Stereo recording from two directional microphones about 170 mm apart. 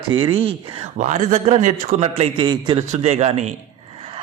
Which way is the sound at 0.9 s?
45° right (ahead or behind).